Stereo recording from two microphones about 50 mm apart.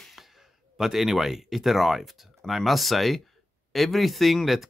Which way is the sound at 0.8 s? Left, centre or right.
Centre.